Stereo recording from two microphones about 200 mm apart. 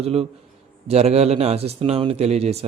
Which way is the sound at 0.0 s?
30° right (ahead or behind).